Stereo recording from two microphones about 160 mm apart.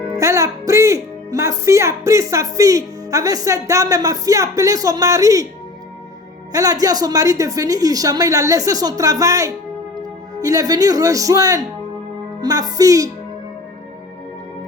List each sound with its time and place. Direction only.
0.2 s a woman's voice: 20° right (ahead or behind)
6.5 s a woman's voice: 20° right (ahead or behind)